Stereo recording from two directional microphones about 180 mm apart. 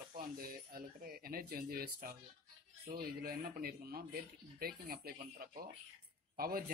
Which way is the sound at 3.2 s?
55° right (ahead or behind).